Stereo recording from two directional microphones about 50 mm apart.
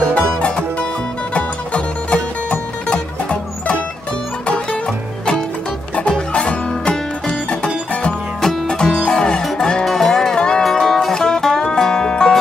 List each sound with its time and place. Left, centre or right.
0.1 s music: left
6.0 s music: centre